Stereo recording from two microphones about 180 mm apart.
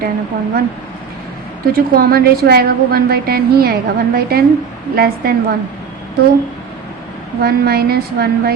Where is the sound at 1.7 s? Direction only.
55° right (ahead or behind).